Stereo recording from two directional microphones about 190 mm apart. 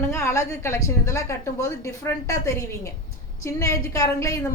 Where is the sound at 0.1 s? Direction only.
15° left (ahead or behind).